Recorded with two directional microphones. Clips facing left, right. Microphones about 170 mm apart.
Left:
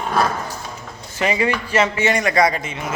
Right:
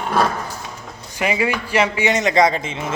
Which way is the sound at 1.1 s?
10° right (ahead or behind).